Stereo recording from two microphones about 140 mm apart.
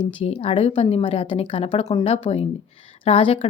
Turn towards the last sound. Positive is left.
turn(degrees=45)  # may be behind; listen again after turning